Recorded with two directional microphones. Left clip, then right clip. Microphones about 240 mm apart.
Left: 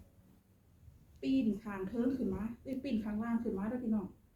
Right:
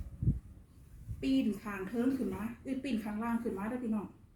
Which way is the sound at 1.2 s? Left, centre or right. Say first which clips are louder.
Right 2 dB; centre.